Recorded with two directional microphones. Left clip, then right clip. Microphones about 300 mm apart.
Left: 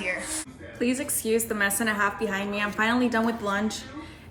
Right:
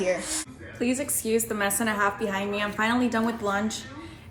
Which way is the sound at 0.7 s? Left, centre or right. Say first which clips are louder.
Even; centre.